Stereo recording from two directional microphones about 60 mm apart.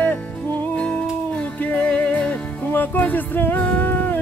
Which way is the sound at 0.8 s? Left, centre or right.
Left.